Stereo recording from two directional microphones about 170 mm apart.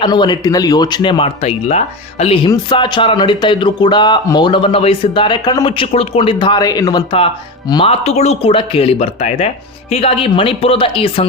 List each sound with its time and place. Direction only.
0.0 s speech: 25° left (ahead or behind)
8.0 s speech: 40° left (ahead or behind)